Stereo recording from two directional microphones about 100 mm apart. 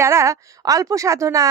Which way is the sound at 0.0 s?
30° right (ahead or behind).